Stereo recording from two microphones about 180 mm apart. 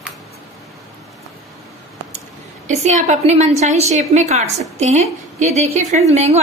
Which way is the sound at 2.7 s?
40° right (ahead or behind).